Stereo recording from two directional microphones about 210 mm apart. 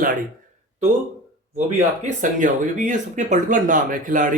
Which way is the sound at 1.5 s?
35° right (ahead or behind).